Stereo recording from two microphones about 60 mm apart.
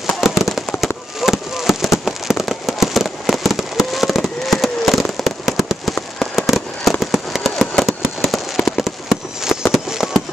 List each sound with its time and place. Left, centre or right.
0.0 s fireworks: centre